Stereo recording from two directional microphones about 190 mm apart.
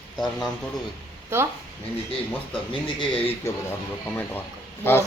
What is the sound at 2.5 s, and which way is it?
Speech, 25° left (ahead or behind).